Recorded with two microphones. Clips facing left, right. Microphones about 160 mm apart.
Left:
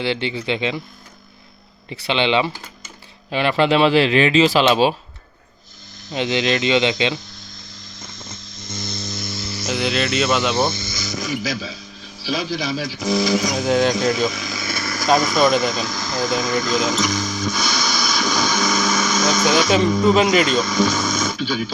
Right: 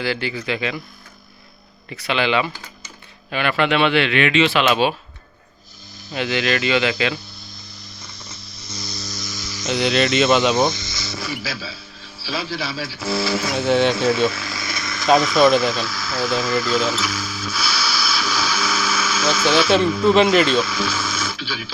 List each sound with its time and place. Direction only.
0.0 s speech: 25° left (ahead or behind)
1.9 s speech: 30° left (ahead or behind)
6.1 s speech: 25° left (ahead or behind)
8.2 s a sound: 50° left (ahead or behind)
9.0 s hum: 55° left (ahead or behind)
9.6 s cricket: centre (ahead or behind)
10.5 s speech: 20° right (ahead or behind)
11.1 s speech: 20° left (ahead or behind)
13.5 s speech: 5° right (ahead or behind)
14.3 s speech: 20° left (ahead or behind)
14.8 s speech: centre (ahead or behind)